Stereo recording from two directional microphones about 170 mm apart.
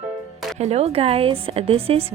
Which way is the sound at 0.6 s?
40° right (ahead or behind).